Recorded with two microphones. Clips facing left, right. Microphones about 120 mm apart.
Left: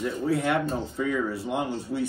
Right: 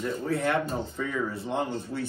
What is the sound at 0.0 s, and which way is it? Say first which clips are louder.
Speech: left 2 dB; 10° left (ahead or behind).